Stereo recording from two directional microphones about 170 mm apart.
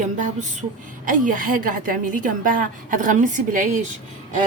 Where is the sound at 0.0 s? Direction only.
45° right (ahead or behind).